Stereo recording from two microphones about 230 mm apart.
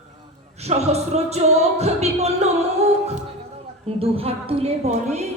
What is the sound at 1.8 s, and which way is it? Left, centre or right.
Music, right.